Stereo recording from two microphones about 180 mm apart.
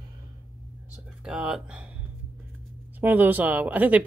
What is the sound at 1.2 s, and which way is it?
Speech, 5° right (ahead or behind).